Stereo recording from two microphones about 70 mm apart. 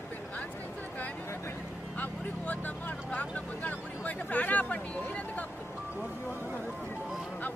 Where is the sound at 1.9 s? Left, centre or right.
Left.